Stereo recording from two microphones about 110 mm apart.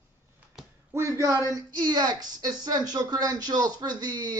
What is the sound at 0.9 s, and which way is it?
Speech, 30° right (ahead or behind).